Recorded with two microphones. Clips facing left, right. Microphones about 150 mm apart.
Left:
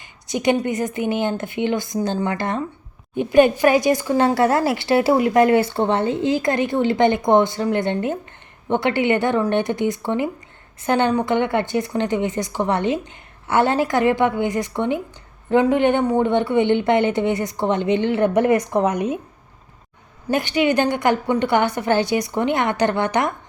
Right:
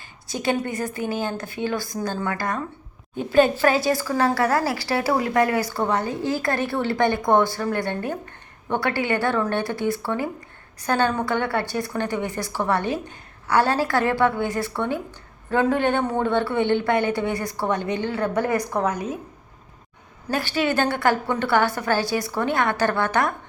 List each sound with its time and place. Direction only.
0.0 s a woman's voice: 20° left (ahead or behind)
18.9 s speech: 65° left (ahead or behind)
20.2 s a woman's voice: 20° left (ahead or behind)